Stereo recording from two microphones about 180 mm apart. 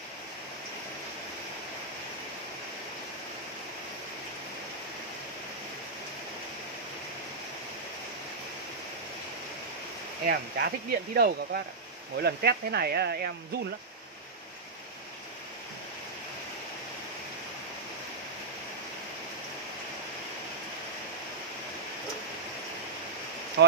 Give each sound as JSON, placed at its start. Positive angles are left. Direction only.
{"t": 10.2, "sound": "speech", "side_deg": -55}